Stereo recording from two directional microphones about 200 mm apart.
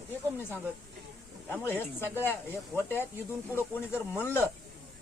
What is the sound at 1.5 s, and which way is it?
A man's voice, 10° left (ahead or behind).